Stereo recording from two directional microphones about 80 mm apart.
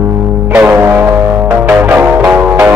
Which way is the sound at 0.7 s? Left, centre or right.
Right.